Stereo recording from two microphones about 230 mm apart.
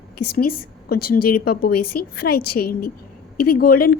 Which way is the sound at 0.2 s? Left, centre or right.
Left.